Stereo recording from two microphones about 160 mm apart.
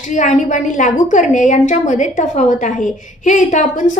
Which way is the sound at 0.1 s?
50° left (ahead or behind).